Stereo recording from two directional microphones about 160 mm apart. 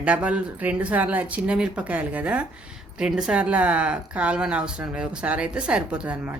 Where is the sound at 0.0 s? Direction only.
10° right (ahead or behind).